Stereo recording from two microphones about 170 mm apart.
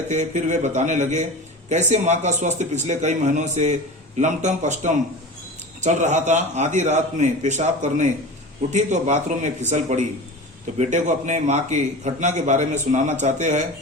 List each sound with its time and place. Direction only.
0.1 s a man's voice: 45° right (ahead or behind)